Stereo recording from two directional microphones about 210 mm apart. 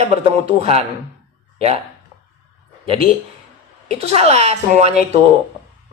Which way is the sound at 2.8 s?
25° right (ahead or behind).